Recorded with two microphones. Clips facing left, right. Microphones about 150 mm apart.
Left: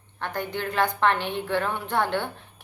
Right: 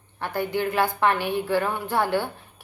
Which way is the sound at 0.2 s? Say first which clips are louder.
Right 4 dB; 10° right (ahead or behind).